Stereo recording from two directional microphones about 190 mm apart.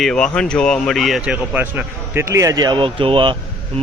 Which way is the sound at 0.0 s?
5° left (ahead or behind).